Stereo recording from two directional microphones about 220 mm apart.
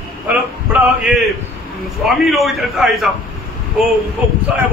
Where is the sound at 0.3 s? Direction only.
5° right (ahead or behind).